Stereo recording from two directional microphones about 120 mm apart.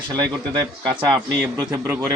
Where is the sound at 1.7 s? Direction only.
20° right (ahead or behind).